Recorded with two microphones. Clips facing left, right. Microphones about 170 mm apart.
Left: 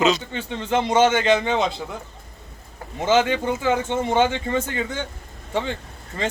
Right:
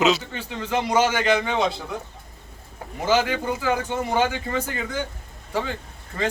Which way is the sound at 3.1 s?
25° left (ahead or behind).